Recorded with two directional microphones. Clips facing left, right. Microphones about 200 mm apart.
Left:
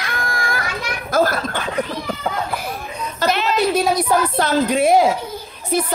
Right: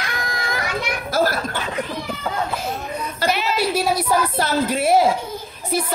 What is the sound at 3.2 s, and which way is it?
A woman's voice, 10° right (ahead or behind).